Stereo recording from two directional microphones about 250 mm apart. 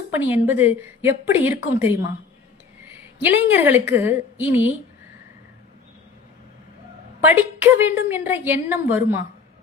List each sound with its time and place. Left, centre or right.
0.1 s a woman's voice: centre
3.2 s a woman's voice: centre
7.2 s a woman's voice: centre